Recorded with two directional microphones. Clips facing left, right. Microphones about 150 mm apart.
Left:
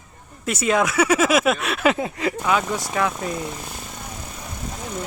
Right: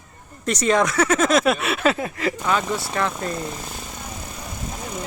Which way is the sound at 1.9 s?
20° left (ahead or behind).